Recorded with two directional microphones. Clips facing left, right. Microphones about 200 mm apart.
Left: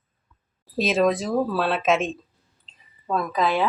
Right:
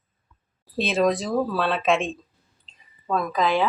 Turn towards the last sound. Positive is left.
turn(degrees=5)  # may be behind; listen again after turning